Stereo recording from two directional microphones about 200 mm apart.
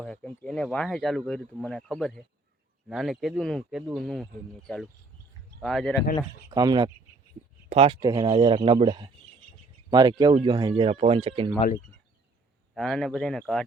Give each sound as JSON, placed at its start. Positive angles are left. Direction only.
{"t": 0.0, "sound": "speech", "side_deg": 5}
{"t": 6.5, "sound": "speech", "side_deg": -20}
{"t": 12.7, "sound": "speech", "side_deg": 0}